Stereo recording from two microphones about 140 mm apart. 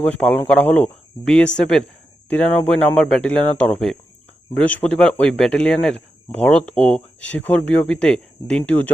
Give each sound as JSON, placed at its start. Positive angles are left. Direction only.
{"t": 0.0, "sound": "speech", "side_deg": 5}